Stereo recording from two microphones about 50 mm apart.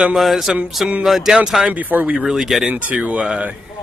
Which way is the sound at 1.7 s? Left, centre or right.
Right.